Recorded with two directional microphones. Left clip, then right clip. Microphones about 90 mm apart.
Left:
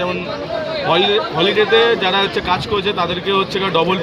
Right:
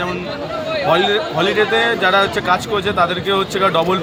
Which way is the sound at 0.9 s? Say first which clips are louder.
Even; 40° right (ahead or behind).